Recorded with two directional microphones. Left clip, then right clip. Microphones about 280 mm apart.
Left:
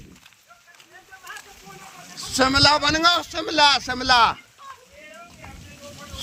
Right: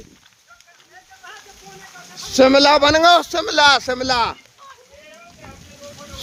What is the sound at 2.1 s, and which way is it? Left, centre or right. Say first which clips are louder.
A man's voice: right 7 dB; centre.